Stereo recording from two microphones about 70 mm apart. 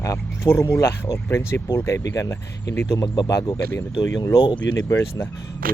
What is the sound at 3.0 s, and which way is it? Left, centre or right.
Speech, left.